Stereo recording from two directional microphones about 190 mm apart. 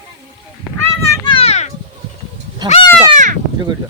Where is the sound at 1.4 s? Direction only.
35° left (ahead or behind).